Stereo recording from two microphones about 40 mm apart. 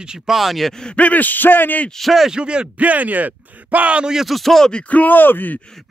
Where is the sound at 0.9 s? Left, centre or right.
Left.